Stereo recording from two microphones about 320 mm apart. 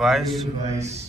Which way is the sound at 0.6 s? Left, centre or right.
Right.